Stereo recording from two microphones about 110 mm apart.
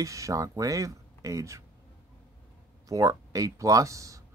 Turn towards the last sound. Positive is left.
turn(degrees=-30)  # may be behind; listen again after turning